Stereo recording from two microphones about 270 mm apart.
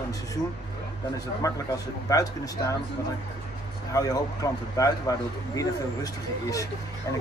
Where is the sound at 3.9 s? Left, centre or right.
Centre.